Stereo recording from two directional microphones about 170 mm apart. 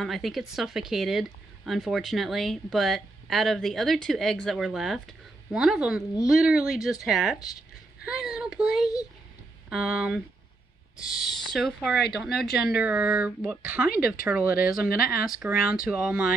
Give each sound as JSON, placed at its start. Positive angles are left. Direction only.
{"t": 0.0, "sound": "speech", "side_deg": 0}
{"t": 8.0, "sound": "child singing", "side_deg": -5}
{"t": 9.7, "sound": "speech", "side_deg": -5}
{"t": 12.3, "sound": "speech", "side_deg": 70}
{"t": 12.6, "sound": "speech", "side_deg": -10}
{"t": 13.8, "sound": "speech", "side_deg": 60}
{"t": 14.2, "sound": "speech", "side_deg": -10}